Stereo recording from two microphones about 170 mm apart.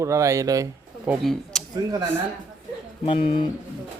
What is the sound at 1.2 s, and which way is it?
Speech, centre (ahead or behind).